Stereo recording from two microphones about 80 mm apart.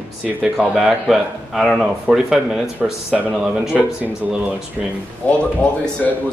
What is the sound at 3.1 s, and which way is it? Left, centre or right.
Speech, centre.